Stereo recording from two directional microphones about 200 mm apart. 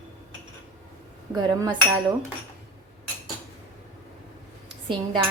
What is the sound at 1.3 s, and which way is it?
Speech, 20° right (ahead or behind).